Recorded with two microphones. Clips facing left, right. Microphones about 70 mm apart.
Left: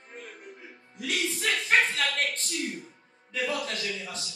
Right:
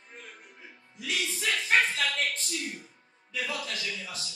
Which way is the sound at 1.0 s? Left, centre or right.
Left.